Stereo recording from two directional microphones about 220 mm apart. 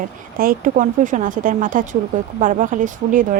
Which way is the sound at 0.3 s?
40° right (ahead or behind).